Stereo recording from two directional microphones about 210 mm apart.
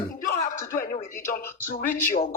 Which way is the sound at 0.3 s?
40° left (ahead or behind).